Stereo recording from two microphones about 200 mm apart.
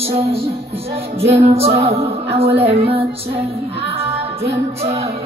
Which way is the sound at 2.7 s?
30° right (ahead or behind).